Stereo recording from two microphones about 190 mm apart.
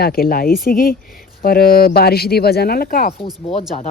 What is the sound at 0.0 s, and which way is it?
Speech, 50° left (ahead or behind).